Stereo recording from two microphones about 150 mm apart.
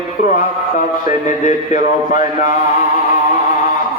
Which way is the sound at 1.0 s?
55° left (ahead or behind).